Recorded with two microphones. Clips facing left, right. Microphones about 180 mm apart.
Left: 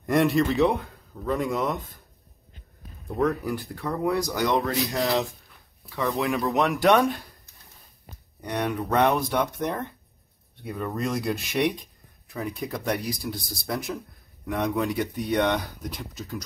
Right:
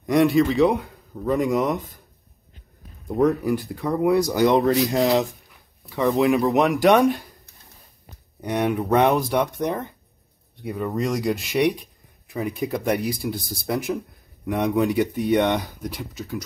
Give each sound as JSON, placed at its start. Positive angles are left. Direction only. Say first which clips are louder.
{"t": 0.0, "sound": "speech", "louder": "right 4 dB", "side_deg": 0}
{"t": 1.2, "sound": "speech", "louder": "right 5 dB", "side_deg": -15}
{"t": 3.1, "sound": "speech", "louder": "right 5 dB", "side_deg": -20}
{"t": 8.4, "sound": "speech", "louder": "right 5 dB", "side_deg": -10}
{"t": 12.3, "sound": "speech", "louder": "right 6 dB", "side_deg": -10}
{"t": 15.9, "sound": "speech", "louder": "right 5 dB", "side_deg": 0}